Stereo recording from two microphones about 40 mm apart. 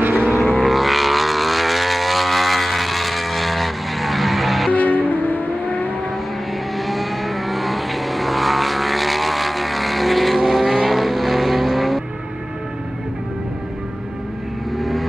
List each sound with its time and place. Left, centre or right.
0.3 s vehicle: centre
4.7 s vehicle: left
6.8 s vehicle: centre
14.8 s vehicle: centre